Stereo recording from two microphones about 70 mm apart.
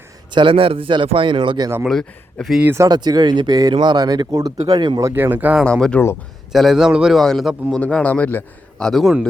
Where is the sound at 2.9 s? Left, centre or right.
Right.